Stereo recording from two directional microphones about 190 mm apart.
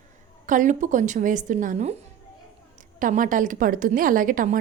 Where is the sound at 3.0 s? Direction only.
45° right (ahead or behind).